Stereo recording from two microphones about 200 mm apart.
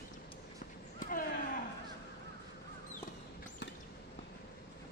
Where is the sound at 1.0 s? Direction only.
45° left (ahead or behind).